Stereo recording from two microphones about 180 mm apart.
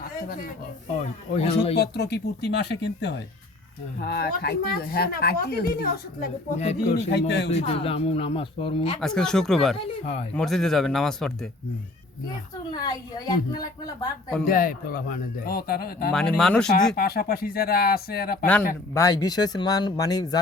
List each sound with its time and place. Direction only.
0.9 s speech: 35° left (ahead or behind)
1.7 s speech: 65° left (ahead or behind)
6.6 s speech: 35° left (ahead or behind)
7.1 s speech: 65° left (ahead or behind)
7.5 s speech: 35° left (ahead or behind)
9.0 s speech: 5° left (ahead or behind)
9.7 s speech: 35° left (ahead or behind)
10.3 s speech: centre (ahead or behind)
12.7 s speech: 20° left (ahead or behind)
14.4 s speech: 50° left (ahead or behind)
16.1 s speech: 5° left (ahead or behind)
16.9 s speech: 60° left (ahead or behind)
18.9 s speech: 20° left (ahead or behind)